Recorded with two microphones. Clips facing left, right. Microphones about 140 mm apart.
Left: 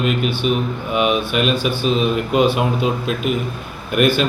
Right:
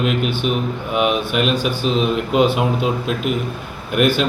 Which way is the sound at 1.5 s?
45° right (ahead or behind).